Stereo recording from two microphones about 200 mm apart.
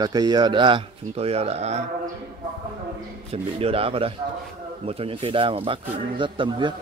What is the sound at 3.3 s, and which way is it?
A man's voice, 30° right (ahead or behind).